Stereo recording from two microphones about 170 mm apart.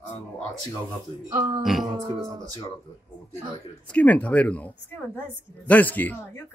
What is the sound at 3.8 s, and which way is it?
Speech, 10° left (ahead or behind).